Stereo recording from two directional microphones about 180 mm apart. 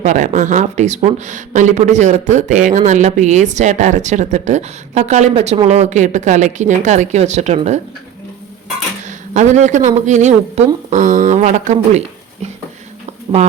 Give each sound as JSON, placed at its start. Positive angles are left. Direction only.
{"t": 0.0, "sound": "speech", "side_deg": -40}
{"t": 9.0, "sound": "speech", "side_deg": -40}